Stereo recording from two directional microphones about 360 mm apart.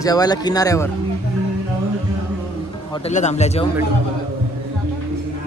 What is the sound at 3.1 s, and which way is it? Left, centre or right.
Speech, centre.